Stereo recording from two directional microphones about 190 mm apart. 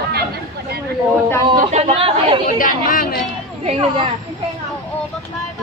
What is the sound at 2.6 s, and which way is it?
Speech, 45° left (ahead or behind).